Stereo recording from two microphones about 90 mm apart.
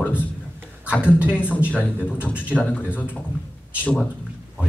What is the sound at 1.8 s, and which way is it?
Speech, 15° right (ahead or behind).